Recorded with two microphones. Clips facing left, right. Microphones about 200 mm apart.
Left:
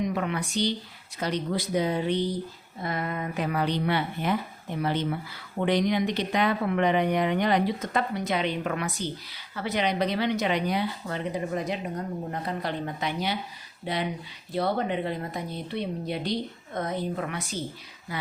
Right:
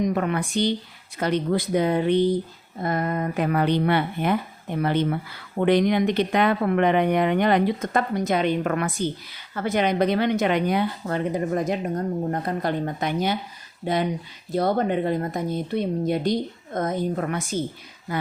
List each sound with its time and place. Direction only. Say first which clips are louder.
0.0 s speech: right 5 dB; 50° right (ahead or behind)
2.8 s speech: right 6 dB; 45° right (ahead or behind)